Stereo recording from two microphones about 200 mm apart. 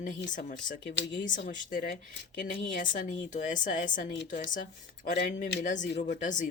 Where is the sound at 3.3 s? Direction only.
40° left (ahead or behind).